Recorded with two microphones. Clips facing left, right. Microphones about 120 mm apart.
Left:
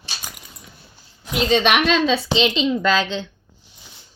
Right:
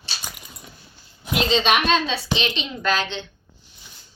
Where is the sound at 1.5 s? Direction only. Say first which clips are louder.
Left 2 dB; 60° left (ahead or behind); by 2.0 s 80° left.